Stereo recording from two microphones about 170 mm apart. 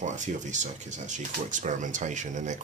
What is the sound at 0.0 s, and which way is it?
Speech, 45° right (ahead or behind).